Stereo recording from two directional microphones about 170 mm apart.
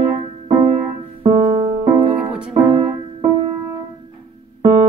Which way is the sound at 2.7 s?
30° right (ahead or behind).